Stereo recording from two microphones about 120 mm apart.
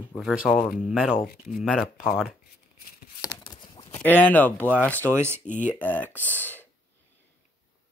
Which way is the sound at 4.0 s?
15° left (ahead or behind).